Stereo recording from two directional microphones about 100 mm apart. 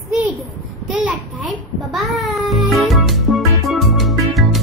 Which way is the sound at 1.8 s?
Centre (ahead or behind).